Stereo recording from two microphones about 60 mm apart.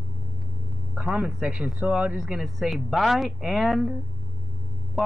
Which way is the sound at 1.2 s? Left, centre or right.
Centre.